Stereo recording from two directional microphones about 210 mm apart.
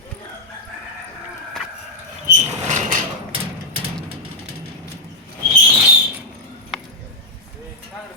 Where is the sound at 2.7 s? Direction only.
35° right (ahead or behind).